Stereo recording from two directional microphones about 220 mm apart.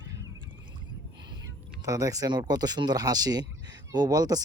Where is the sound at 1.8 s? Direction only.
15° right (ahead or behind).